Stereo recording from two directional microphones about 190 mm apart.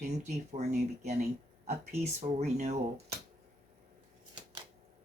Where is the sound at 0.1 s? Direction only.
35° right (ahead or behind).